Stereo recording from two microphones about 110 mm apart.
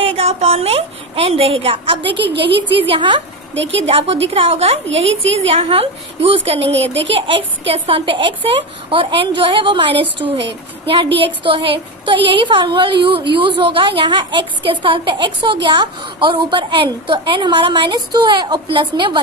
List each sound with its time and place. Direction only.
0.0 s a woman's voice: 65° right (ahead or behind)
3.8 s a woman's voice: 65° right (ahead or behind); by 19.1 s 50° right (ahead or behind)